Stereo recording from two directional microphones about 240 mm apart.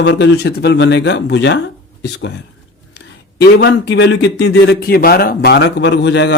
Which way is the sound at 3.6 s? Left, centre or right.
Left.